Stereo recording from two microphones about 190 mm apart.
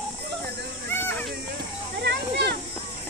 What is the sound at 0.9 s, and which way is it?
Children playing, 10° left (ahead or behind).